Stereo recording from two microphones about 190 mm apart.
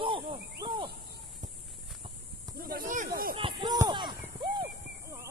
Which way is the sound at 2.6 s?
50° right (ahead or behind).